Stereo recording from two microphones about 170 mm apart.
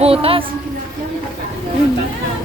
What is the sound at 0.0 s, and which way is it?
Speech, 35° right (ahead or behind).